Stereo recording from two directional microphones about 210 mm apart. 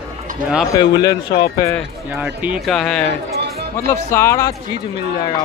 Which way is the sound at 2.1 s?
5° right (ahead or behind).